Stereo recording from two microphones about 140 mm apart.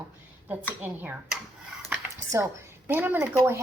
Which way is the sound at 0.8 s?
10° right (ahead or behind).